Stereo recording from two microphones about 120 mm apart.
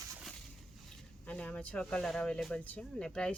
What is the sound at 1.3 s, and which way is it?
Speech, 10° left (ahead or behind).